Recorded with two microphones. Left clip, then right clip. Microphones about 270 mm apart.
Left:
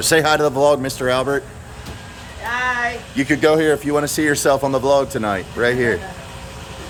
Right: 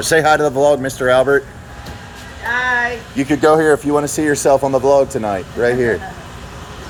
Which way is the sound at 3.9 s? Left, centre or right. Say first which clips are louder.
Right 2 dB; centre.